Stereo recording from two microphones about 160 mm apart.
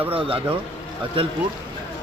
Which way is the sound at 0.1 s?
35° right (ahead or behind).